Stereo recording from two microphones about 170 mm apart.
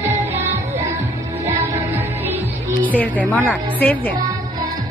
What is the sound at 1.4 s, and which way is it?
Music, 15° right (ahead or behind).